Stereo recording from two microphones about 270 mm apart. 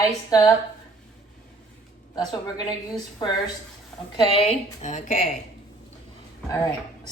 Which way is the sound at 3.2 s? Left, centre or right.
Centre.